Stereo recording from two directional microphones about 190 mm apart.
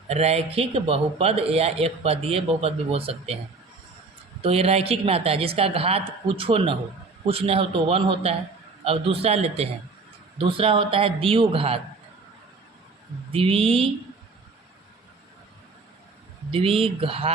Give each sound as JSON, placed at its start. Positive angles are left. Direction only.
{"t": 0.1, "sound": "speech", "side_deg": -35}
{"t": 4.4, "sound": "a man's voice", "side_deg": -30}
{"t": 13.3, "sound": "a man's voice", "side_deg": -30}
{"t": 16.5, "sound": "a man's voice", "side_deg": -30}